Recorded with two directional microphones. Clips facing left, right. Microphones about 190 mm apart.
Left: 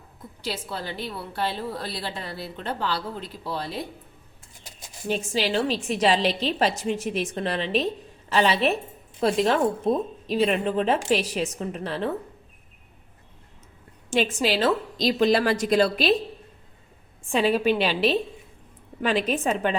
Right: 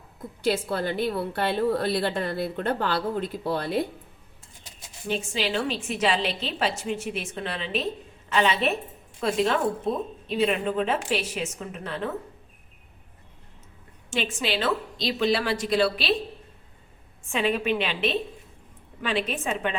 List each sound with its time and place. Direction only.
0.4 s a woman's voice: 50° right (ahead or behind)
5.0 s a woman's voice: 40° left (ahead or behind)
14.1 s a woman's voice: 40° left (ahead or behind)
17.2 s a woman's voice: 35° left (ahead or behind)